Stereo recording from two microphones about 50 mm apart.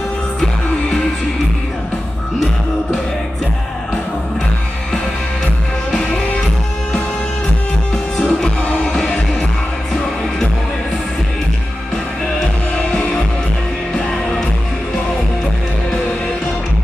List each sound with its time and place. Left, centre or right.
5.9 s music: centre
7.9 s music: centre
8.6 s music: left
13.9 s music: centre